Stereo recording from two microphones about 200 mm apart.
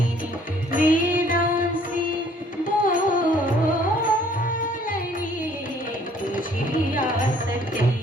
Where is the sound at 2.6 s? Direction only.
45° left (ahead or behind).